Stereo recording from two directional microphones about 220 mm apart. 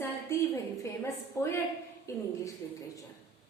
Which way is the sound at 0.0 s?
15° left (ahead or behind).